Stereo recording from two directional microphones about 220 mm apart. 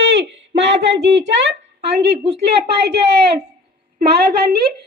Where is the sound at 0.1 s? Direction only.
50° right (ahead or behind).